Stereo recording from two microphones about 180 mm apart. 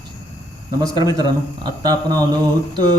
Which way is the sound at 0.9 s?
25° right (ahead or behind).